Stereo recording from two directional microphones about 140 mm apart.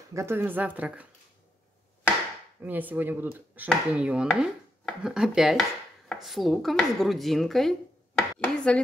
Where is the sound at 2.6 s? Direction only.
10° right (ahead or behind).